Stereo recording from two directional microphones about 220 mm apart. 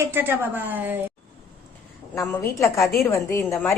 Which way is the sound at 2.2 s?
15° left (ahead or behind).